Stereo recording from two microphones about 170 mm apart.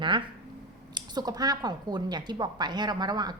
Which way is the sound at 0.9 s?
25° right (ahead or behind).